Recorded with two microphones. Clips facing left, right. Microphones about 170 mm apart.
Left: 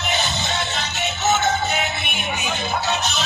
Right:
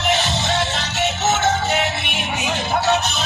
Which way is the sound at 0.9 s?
80° right.